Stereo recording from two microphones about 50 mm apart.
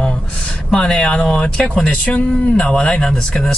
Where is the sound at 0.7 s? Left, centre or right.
Centre.